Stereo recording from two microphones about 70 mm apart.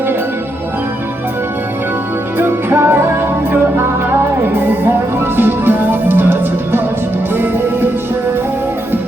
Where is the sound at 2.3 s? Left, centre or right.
Right.